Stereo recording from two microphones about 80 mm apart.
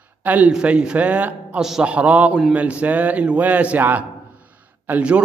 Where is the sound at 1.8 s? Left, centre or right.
Centre.